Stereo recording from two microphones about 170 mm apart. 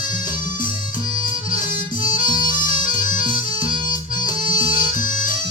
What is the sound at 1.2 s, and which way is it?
Music, 50° left (ahead or behind).